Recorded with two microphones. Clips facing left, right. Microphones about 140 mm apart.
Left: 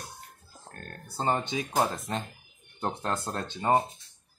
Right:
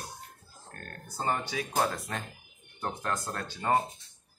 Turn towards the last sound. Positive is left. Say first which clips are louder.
# left 3 dB
turn(degrees=20)  # may be behind; listen again after turning